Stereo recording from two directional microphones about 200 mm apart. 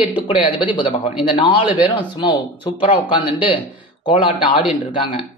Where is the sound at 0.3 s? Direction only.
25° left (ahead or behind).